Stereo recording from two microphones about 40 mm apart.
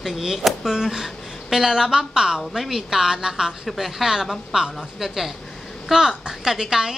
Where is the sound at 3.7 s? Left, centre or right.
Centre.